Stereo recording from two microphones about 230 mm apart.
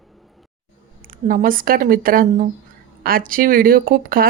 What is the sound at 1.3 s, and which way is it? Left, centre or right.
Speech, right.